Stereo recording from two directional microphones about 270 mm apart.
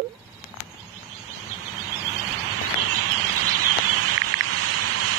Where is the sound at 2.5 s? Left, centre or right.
Right.